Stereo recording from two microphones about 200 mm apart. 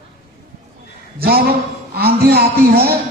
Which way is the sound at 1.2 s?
50° right (ahead or behind).